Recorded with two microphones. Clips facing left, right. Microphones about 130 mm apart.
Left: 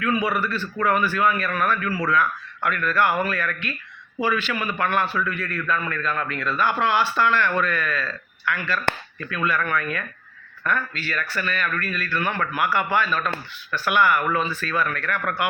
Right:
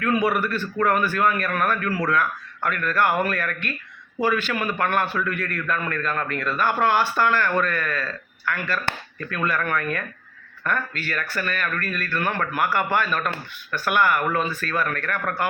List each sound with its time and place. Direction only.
0.0 s a man's voice: 50° right (ahead or behind)